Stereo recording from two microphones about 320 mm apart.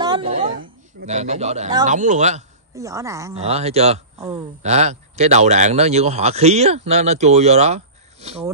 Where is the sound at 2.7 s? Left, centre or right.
Centre.